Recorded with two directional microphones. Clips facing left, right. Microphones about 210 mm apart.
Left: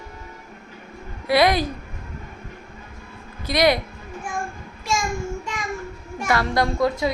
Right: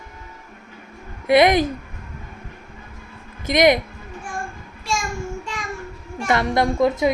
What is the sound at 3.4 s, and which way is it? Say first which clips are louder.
Speech: right 3 dB; 20° right (ahead or behind).